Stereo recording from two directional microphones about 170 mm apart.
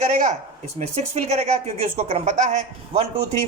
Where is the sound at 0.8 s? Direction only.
40° right (ahead or behind).